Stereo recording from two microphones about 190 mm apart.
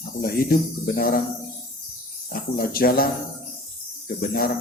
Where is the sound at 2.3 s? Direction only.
50° left (ahead or behind).